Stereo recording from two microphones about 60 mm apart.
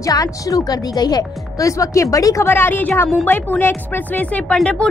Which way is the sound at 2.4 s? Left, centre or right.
Left.